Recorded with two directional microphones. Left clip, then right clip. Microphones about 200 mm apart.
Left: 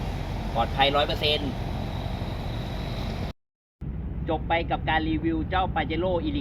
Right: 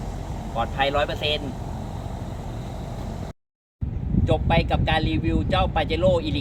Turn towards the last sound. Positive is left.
turn(degrees=-40)  # may be behind; listen again after turning